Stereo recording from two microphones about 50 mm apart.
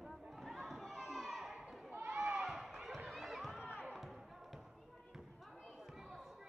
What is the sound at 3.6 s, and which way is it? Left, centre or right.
Music, left.